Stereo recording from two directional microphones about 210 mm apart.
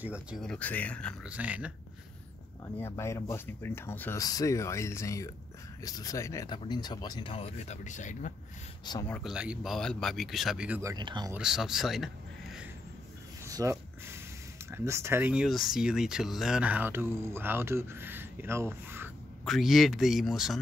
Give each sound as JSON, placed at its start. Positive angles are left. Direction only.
{"t": 0.0, "sound": "speech", "side_deg": -5}
{"t": 1.3, "sound": "speech", "side_deg": -5}
{"t": 2.6, "sound": "speech", "side_deg": 15}
{"t": 9.0, "sound": "speech", "side_deg": 0}
{"t": 11.3, "sound": "speech", "side_deg": -5}
{"t": 13.4, "sound": "a sound", "side_deg": -15}
{"t": 14.7, "sound": "speech", "side_deg": -15}
{"t": 19.4, "sound": "speech", "side_deg": 0}